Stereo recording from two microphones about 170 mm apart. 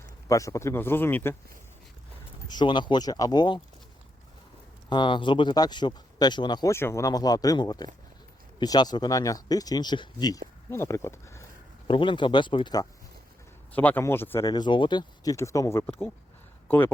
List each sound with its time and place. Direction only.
0.3 s speech: 20° left (ahead or behind)
2.5 s speech: 25° left (ahead or behind)
4.9 s speech: 25° left (ahead or behind)
11.9 s speech: 30° left (ahead or behind)
13.7 s speech: 10° left (ahead or behind)